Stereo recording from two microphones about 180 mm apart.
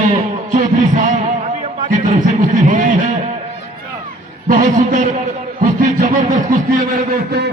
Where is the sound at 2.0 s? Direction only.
45° right (ahead or behind).